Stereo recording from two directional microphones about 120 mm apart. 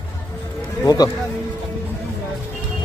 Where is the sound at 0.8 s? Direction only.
30° left (ahead or behind).